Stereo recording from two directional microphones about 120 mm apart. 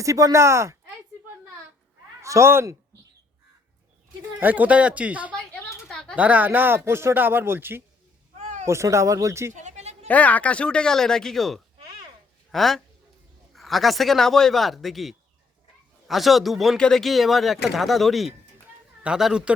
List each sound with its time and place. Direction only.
0.0 s speech: 25° right (ahead or behind)
2.2 s a man's voice: 25° right (ahead or behind)
4.4 s speech: 15° right (ahead or behind)
5.9 s a sound: 5° left (ahead or behind)
6.1 s speech: 10° right (ahead or behind)
9.5 s a sound: 85° right; by 10.1 s 65° right (ahead or behind)
10.1 s speech: 10° left (ahead or behind); by 19.5 s 5° right (ahead or behind)